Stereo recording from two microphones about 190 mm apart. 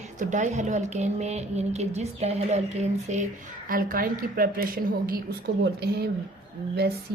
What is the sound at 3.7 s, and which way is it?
A woman's voice, 50° right (ahead or behind).